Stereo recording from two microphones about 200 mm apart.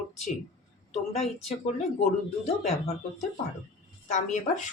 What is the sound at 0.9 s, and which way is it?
Speech, 30° left (ahead or behind).